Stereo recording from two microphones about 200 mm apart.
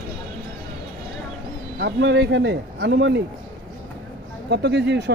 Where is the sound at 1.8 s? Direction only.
60° right (ahead or behind).